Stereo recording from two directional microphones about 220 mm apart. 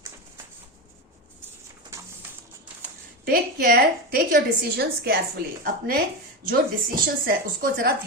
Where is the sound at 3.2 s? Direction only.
45° right (ahead or behind).